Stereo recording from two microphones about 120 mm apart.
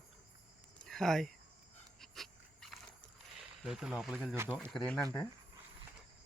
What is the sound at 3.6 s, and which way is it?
Speech, 5° right (ahead or behind).